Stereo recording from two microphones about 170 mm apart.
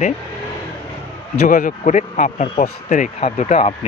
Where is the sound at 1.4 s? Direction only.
50° left (ahead or behind).